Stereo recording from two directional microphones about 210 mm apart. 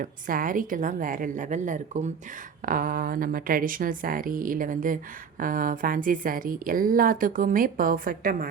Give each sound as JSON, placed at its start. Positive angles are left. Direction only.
{"t": 0.0, "sound": "a woman's voice", "side_deg": -40}